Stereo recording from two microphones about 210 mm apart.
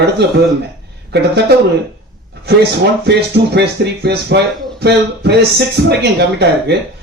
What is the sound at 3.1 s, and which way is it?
A man's voice, 55° right (ahead or behind).